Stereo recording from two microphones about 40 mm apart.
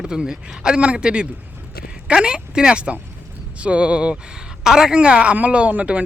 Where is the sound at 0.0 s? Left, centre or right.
Centre.